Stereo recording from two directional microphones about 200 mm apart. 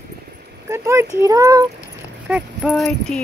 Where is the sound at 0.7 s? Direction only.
15° right (ahead or behind).